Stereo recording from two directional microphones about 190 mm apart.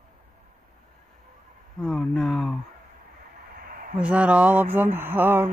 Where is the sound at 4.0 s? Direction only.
5° right (ahead or behind).